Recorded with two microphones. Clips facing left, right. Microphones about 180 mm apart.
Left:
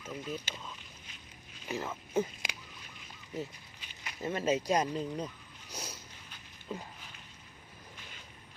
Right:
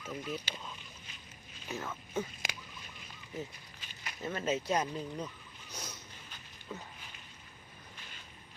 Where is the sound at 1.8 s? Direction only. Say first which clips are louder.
Left 6 dB; 30° left (ahead or behind).